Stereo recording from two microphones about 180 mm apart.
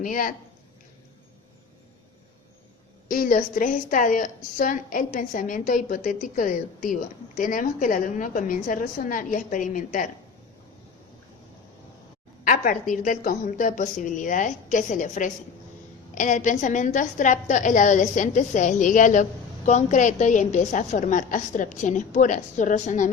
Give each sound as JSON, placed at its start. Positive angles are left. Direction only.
{"t": 0.0, "sound": "a woman's voice", "side_deg": 50}
{"t": 3.1, "sound": "a woman's voice", "side_deg": 50}
{"t": 12.5, "sound": "a woman's voice", "side_deg": 45}